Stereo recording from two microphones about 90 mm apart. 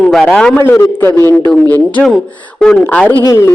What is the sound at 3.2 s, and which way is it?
Speech, 35° left (ahead or behind).